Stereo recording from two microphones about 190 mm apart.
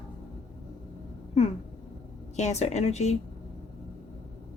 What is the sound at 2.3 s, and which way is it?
Speech, 35° left (ahead or behind).